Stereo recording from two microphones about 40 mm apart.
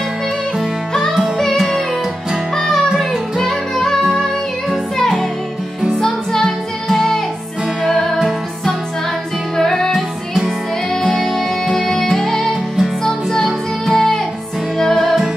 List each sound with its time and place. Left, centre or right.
2.5 s music: centre
6.9 s music: centre
7.8 s music: centre
9.6 s music: centre
11.0 s music: centre